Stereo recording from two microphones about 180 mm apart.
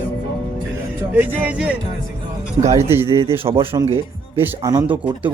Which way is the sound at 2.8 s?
15° right (ahead or behind).